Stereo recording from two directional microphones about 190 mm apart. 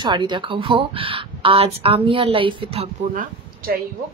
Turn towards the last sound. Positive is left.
turn(degrees=-50)  # may be behind; listen again after turning